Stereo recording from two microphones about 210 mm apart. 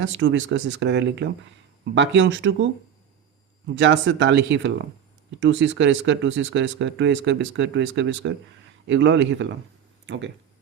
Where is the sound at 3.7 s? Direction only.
55° right (ahead or behind).